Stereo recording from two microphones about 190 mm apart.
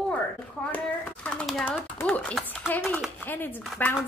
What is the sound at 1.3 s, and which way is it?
A child's voice, centre (ahead or behind).